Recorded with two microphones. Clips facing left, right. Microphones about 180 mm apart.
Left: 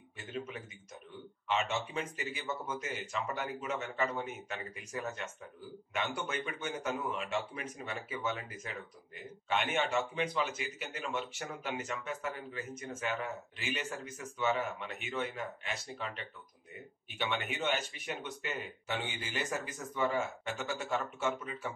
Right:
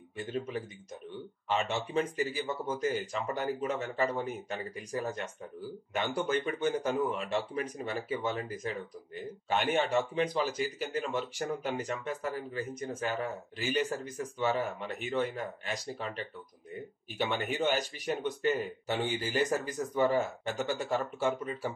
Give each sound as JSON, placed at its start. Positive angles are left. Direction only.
{"t": 1.5, "sound": "speech", "side_deg": -35}